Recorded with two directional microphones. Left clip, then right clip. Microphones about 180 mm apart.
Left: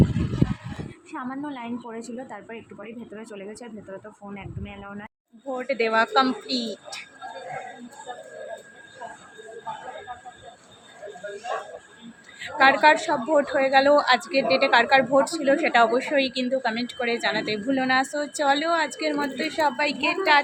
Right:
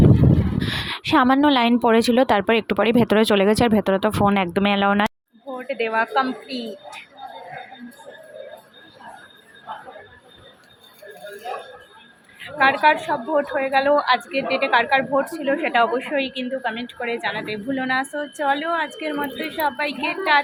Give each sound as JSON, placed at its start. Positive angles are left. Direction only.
{"t": 0.8, "sound": "a woman's voice", "side_deg": -55}
{"t": 5.5, "sound": "a woman's voice", "side_deg": 15}
{"t": 12.4, "sound": "a woman's voice", "side_deg": 20}